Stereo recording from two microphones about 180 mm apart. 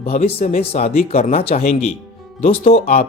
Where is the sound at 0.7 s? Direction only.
35° left (ahead or behind).